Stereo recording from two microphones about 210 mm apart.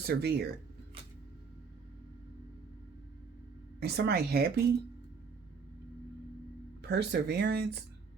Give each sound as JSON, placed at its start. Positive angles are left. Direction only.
{"t": 0.0, "sound": "speech", "side_deg": -50}
{"t": 3.8, "sound": "speech", "side_deg": -50}
{"t": 6.8, "sound": "speech", "side_deg": -50}